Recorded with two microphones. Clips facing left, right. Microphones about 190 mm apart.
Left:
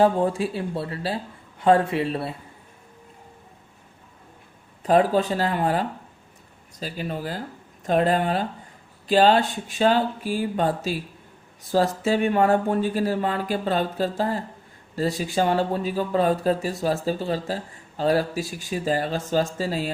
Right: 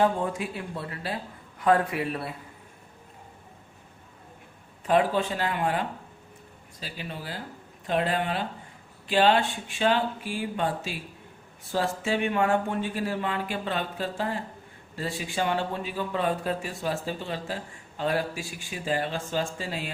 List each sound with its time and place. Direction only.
0.0 s speech: 30° left (ahead or behind)
4.8 s speech: 40° left (ahead or behind)